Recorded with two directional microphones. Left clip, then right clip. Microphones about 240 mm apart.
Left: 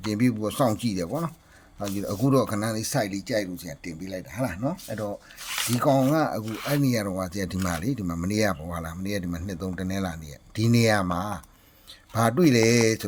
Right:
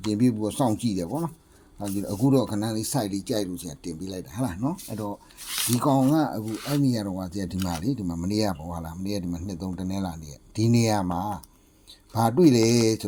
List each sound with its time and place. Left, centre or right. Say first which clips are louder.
0.0 s speech: right 1 dB; centre
12.4 s speech: right 1 dB; centre